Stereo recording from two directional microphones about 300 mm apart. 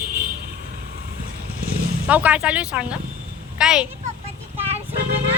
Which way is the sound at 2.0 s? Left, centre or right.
Centre.